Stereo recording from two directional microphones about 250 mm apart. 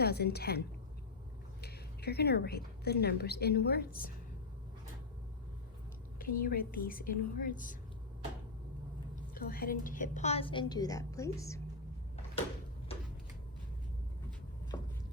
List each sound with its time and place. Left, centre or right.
0.0 s a woman's voice: left
1.6 s a woman's voice: left
6.1 s a woman's voice: left
9.3 s a woman's voice: left; by 11.6 s centre
14.7 s a sound: centre